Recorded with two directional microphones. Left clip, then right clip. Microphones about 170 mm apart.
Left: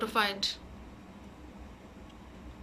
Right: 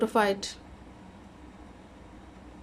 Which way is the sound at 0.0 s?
40° right (ahead or behind).